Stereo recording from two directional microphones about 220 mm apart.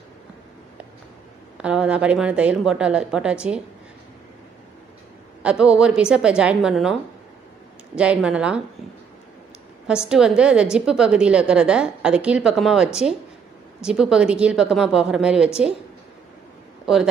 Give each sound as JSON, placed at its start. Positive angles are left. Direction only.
{"t": 1.6, "sound": "a woman's voice", "side_deg": -5}
{"t": 5.4, "sound": "a woman's voice", "side_deg": -5}
{"t": 9.8, "sound": "a woman's voice", "side_deg": -5}
{"t": 16.8, "sound": "speech", "side_deg": 0}